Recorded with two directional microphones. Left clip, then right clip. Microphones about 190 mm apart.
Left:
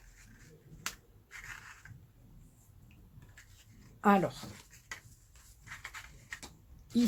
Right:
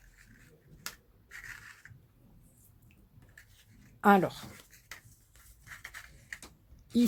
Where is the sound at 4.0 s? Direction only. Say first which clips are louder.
Right 4 dB; 55° right (ahead or behind).